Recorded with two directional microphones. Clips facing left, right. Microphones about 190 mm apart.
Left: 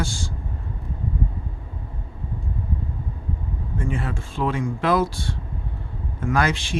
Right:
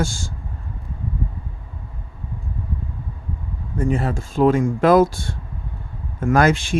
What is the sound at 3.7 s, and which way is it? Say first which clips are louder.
Speech: right 7 dB; 40° right (ahead or behind).